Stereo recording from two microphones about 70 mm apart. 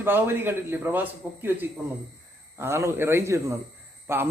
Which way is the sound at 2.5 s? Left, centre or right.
Right.